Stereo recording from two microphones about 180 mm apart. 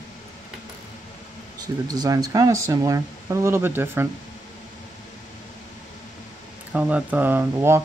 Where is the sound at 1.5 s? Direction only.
20° right (ahead or behind).